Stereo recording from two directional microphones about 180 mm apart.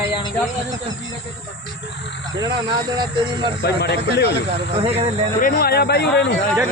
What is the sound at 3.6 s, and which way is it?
Speech, 65° left (ahead or behind).